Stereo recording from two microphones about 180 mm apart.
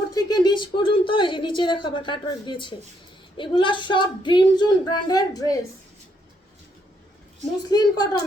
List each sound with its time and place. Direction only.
0.1 s a woman's voice: 20° left (ahead or behind)
7.7 s a woman's voice: 20° left (ahead or behind)